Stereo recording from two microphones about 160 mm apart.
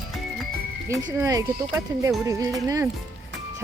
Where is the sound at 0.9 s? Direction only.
20° right (ahead or behind).